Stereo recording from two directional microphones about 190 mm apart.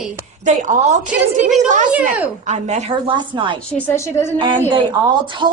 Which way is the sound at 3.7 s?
15° left (ahead or behind).